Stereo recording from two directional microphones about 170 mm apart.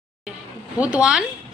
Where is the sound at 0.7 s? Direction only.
5° right (ahead or behind).